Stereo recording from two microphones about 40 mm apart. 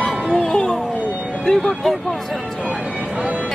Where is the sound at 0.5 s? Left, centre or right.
Left.